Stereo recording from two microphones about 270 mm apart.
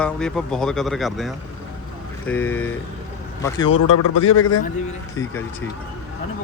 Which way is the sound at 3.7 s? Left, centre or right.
Left.